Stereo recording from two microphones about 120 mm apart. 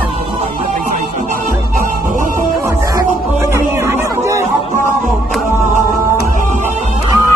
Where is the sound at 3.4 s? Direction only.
20° right (ahead or behind).